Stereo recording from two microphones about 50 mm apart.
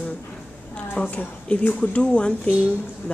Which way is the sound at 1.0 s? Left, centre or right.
Left.